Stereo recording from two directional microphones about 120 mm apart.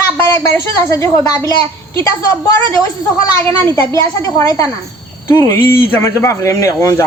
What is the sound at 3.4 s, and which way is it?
A man's voice, 20° left (ahead or behind).